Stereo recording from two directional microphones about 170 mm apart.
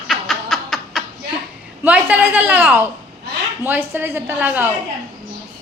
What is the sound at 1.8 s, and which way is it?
A woman's voice, 10° right (ahead or behind).